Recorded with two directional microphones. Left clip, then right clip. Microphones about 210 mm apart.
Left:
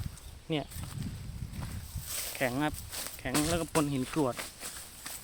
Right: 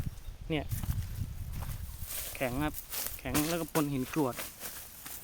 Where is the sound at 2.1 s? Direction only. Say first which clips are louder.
Left 4 dB; 15° left (ahead or behind).